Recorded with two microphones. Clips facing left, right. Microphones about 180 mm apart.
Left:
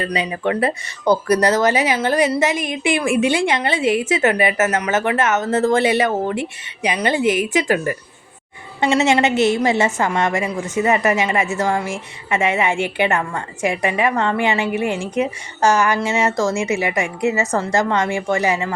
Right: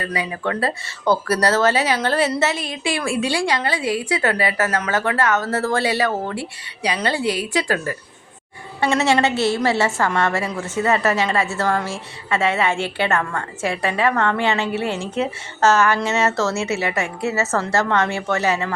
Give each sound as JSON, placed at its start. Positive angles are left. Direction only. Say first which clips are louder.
{"t": 0.0, "sound": "a woman's voice", "louder": "left 3 dB", "side_deg": 20}